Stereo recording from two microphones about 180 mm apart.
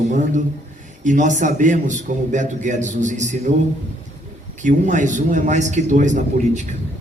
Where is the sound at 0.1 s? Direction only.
45° right (ahead or behind).